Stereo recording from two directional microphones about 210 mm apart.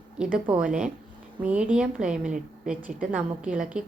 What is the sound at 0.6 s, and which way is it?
A woman's voice, 5° right (ahead or behind).